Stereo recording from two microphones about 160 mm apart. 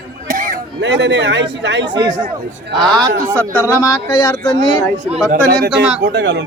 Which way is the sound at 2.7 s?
Centre (ahead or behind).